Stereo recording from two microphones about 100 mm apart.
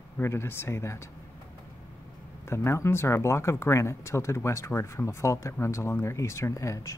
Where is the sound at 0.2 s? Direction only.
25° left (ahead or behind).